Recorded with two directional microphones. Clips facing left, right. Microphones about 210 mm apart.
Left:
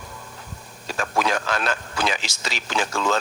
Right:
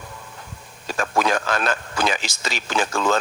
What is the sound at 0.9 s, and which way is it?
A man's voice, 45° right (ahead or behind).